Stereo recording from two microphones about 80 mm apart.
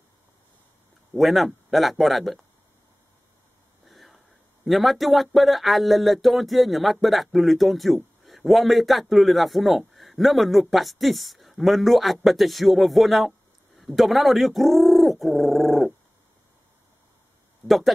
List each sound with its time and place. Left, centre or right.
1.1 s speech: centre
3.8 s a sound: centre
4.6 s speech: centre
17.6 s speech: centre